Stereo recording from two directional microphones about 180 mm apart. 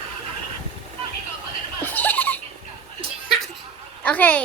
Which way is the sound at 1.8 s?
10° left (ahead or behind).